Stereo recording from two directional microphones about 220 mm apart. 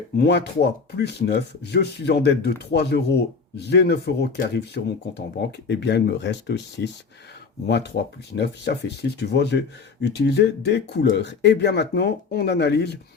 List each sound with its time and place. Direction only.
0.2 s speech: 50° left (ahead or behind)